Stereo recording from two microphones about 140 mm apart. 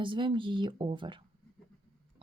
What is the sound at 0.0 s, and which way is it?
Speech, 35° right (ahead or behind).